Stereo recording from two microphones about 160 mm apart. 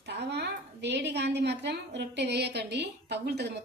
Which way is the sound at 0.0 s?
90° right.